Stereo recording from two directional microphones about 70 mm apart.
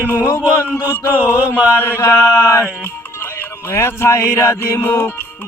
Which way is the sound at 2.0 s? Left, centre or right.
Left.